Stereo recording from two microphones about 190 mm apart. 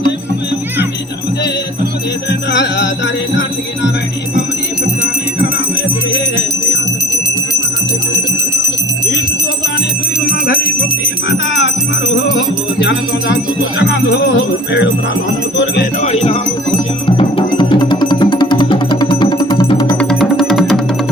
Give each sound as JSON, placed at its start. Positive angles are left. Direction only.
{"t": 2.5, "sound": "music", "side_deg": 70}
{"t": 10.2, "sound": "jingle bell", "side_deg": 55}
{"t": 12.8, "sound": "music", "side_deg": 70}
{"t": 16.0, "sound": "music", "side_deg": 35}
{"t": 20.0, "sound": "music", "side_deg": 5}